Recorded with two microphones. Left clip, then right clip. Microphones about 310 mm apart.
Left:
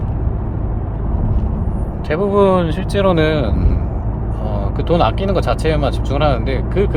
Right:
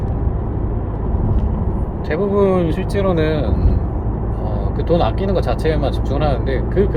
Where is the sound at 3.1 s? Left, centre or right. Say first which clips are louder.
Left 3 dB; left.